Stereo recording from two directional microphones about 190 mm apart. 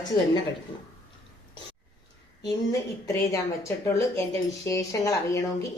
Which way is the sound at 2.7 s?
15° left (ahead or behind).